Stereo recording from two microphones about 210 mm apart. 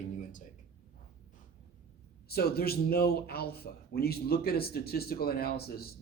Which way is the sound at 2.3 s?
50° left (ahead or behind).